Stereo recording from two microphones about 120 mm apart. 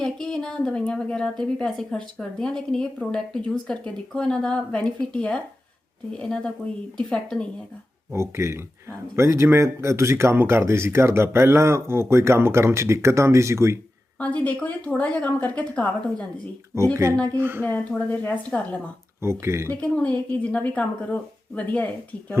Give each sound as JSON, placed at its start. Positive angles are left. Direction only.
{"t": 0.0, "sound": "speech", "side_deg": 5}
{"t": 8.1, "sound": "speech", "side_deg": -25}
{"t": 14.2, "sound": "speech", "side_deg": 10}
{"t": 16.7, "sound": "speech", "side_deg": -25}
{"t": 17.2, "sound": "speech", "side_deg": 10}
{"t": 19.2, "sound": "speech", "side_deg": -20}
{"t": 19.7, "sound": "speech", "side_deg": 10}